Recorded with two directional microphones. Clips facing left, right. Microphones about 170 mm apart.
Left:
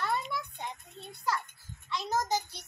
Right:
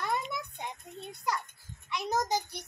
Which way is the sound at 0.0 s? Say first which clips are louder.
Even; 15° right (ahead or behind).